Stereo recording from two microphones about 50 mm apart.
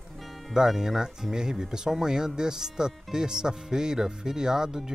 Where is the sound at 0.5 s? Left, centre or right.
Centre.